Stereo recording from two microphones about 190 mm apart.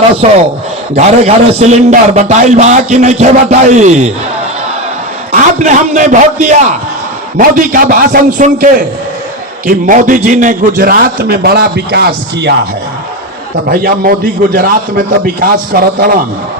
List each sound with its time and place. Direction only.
0.2 s a man's voice: 40° right (ahead or behind)
5.3 s a man's voice: 40° right (ahead or behind)
9.6 s a man's voice: 45° right (ahead or behind); by 12.5 s 60° right (ahead or behind)
13.7 s a man's voice: 50° right (ahead or behind)